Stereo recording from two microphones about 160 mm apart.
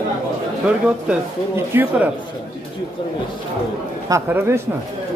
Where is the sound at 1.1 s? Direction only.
10° right (ahead or behind).